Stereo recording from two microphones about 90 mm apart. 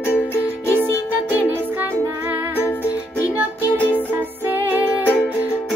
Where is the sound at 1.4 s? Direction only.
20° right (ahead or behind).